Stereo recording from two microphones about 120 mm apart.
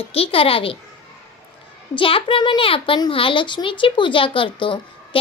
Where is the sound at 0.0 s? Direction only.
55° left (ahead or behind).